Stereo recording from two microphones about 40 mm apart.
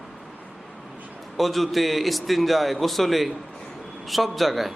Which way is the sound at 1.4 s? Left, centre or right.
Centre.